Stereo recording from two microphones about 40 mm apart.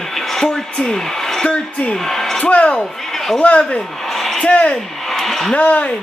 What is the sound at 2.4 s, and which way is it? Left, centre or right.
Speech, left.